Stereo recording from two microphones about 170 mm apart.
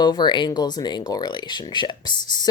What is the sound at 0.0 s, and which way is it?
Speech, 25° left (ahead or behind).